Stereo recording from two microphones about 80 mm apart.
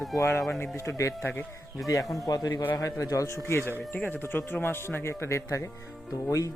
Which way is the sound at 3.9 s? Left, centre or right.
Left.